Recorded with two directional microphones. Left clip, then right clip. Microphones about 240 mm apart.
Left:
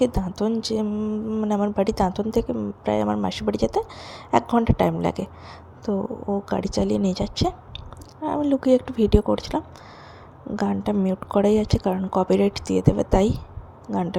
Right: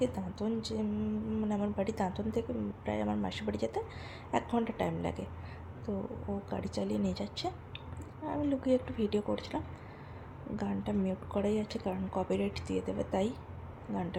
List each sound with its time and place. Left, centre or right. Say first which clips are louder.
0.0 s speech: left 12 dB; left